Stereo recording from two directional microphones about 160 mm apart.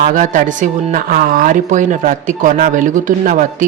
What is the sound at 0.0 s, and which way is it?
Speech, 55° right (ahead or behind).